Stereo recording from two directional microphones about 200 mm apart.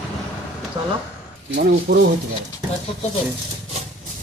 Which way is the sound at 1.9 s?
60° right (ahead or behind).